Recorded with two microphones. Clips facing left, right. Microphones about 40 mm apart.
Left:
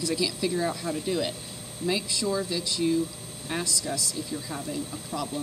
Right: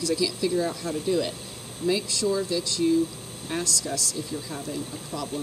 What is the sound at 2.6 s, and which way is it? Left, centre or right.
Speech, centre.